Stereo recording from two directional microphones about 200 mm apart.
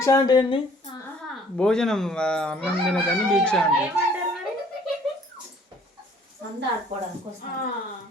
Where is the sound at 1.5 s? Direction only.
5° left (ahead or behind).